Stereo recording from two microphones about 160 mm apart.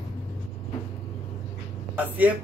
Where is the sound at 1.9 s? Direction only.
10° right (ahead or behind).